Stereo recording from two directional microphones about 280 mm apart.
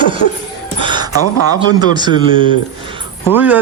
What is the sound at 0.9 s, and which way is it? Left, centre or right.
Speech, centre.